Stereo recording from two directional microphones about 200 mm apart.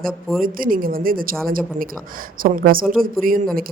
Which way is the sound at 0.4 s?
45° right (ahead or behind).